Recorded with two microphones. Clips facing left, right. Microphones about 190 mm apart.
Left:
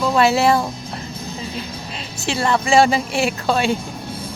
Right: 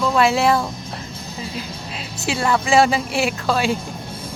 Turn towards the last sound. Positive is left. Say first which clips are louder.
# left 1 dB
turn(degrees=0)  # may be behind; listen again after turning